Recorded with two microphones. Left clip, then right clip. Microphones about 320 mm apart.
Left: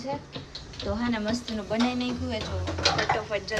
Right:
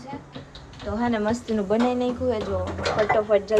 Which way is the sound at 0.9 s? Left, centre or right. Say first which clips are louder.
Right 7 dB; centre.